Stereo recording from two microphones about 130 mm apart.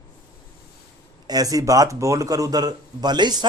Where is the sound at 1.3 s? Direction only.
30° right (ahead or behind).